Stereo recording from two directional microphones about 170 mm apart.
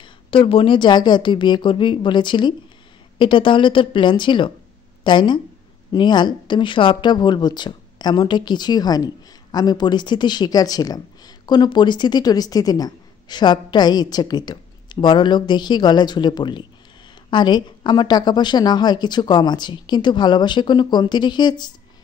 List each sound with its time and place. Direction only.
0.0 s a woman's voice: 30° left (ahead or behind)